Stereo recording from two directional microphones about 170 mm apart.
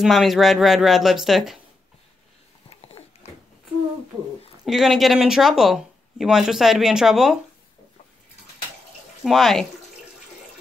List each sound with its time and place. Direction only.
0.0 s speech: centre (ahead or behind)
3.0 s a sound: 30° left (ahead or behind)
4.6 s speech: centre (ahead or behind)
9.2 s speech: centre (ahead or behind)